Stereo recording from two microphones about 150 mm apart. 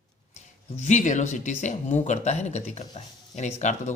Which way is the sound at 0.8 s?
50° left (ahead or behind).